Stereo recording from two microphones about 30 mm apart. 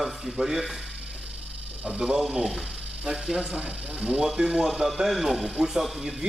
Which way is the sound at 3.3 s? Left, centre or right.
Right.